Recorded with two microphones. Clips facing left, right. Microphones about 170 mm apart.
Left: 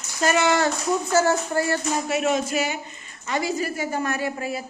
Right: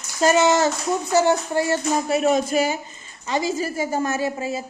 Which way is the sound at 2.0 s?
35° right (ahead or behind).